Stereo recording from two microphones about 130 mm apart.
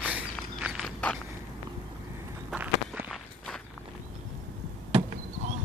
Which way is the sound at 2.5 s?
10° right (ahead or behind).